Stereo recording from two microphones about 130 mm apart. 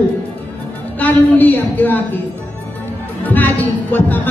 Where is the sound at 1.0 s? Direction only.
15° left (ahead or behind).